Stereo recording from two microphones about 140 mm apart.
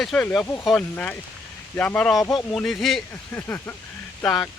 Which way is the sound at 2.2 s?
25° left (ahead or behind).